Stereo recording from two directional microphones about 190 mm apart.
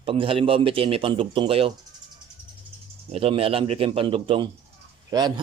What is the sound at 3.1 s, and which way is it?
A man's voice, 30° right (ahead or behind).